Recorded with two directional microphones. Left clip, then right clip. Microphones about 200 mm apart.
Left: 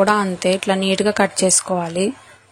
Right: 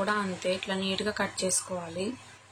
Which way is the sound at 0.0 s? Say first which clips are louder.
Left 13 dB; 45° left (ahead or behind).